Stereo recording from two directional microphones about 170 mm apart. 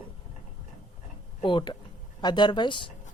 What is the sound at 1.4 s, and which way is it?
Speech, 30° left (ahead or behind).